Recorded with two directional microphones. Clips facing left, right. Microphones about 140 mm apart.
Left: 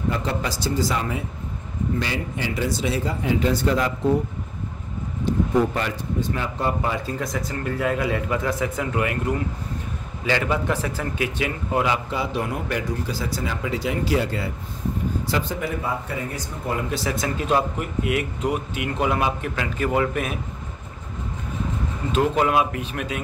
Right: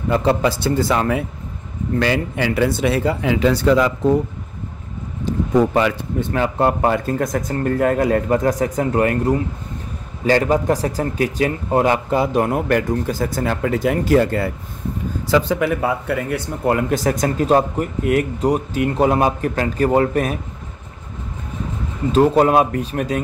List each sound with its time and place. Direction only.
0.1 s speech: 70° right (ahead or behind); by 3.9 s 90° right
5.8 s speech: 75° right (ahead or behind); by 14.5 s 55° right (ahead or behind)
15.4 s speech: 70° right (ahead or behind)
17.0 s speech: 45° right (ahead or behind)
22.1 s speech: 35° right (ahead or behind)